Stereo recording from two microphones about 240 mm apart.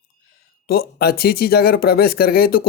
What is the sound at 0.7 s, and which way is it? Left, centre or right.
Speech, left.